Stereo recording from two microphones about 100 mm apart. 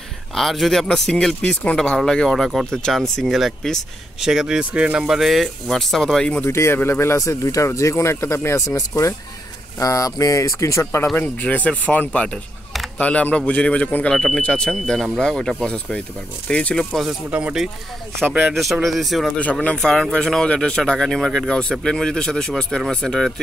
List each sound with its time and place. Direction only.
0.3 s speech: centre (ahead or behind)
6.4 s speech: 25° left (ahead or behind)
11.2 s speech: 15° left (ahead or behind)
17.3 s speech: 10° right (ahead or behind)
18.5 s speech: centre (ahead or behind)